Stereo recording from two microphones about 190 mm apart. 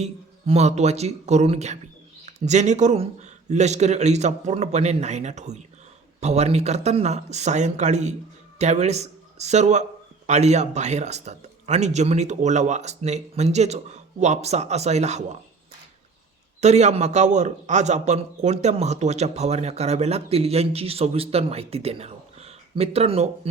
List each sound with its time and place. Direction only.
0.0 s a man's voice: 35° right (ahead or behind)
16.6 s a man's voice: 35° right (ahead or behind)